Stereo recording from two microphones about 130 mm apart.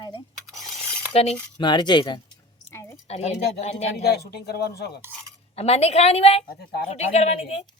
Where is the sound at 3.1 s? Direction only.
55° left (ahead or behind).